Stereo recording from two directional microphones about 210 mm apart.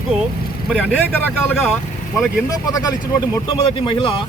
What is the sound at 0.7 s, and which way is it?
Speech, 5° left (ahead or behind).